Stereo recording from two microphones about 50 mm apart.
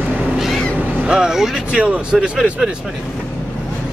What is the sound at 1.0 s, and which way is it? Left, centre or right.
Speech, centre.